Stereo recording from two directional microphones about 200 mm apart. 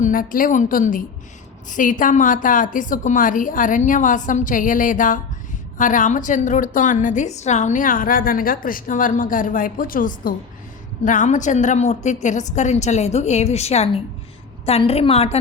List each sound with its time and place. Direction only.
0.0 s a woman's voice: 45° left (ahead or behind)